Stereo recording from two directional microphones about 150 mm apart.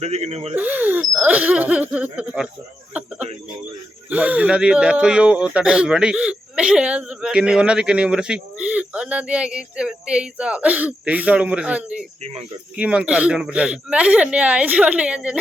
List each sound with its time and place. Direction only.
0.0 s speech: 45° right (ahead or behind)
0.5 s speech: 10° right (ahead or behind)
4.1 s speech: 10° right (ahead or behind)